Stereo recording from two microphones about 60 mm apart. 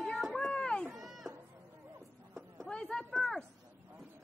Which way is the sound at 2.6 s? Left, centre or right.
Centre.